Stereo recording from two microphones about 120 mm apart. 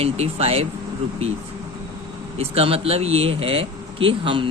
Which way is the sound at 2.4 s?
55° right (ahead or behind).